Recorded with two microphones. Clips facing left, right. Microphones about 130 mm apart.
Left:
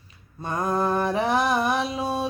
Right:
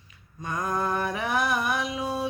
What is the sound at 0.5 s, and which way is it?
Mantra, 30° left (ahead or behind).